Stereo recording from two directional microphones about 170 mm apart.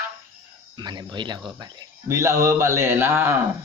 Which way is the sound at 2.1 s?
15° right (ahead or behind).